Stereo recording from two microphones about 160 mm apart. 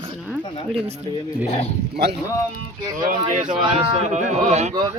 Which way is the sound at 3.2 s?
50° right (ahead or behind).